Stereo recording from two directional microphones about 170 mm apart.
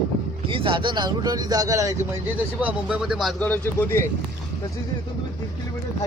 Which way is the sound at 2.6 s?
5° right (ahead or behind).